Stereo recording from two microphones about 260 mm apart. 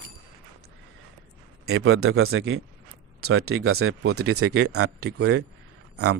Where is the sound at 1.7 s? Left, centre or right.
Right.